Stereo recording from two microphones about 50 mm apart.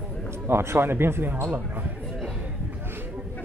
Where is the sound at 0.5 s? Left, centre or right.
Right.